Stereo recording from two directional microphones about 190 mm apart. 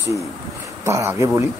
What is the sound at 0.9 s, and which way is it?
Speech, 15° right (ahead or behind).